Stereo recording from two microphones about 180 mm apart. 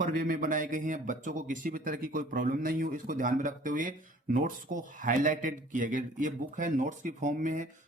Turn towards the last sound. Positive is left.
turn(degrees=-45)  # may be behind; listen again after turning